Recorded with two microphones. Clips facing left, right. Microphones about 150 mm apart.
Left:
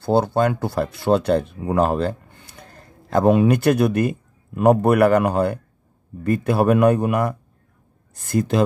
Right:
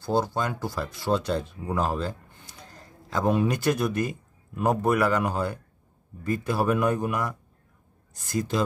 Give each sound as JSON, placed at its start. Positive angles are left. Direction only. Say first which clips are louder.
{"t": 0.0, "sound": "a man's voice", "louder": "left 8 dB", "side_deg": 65}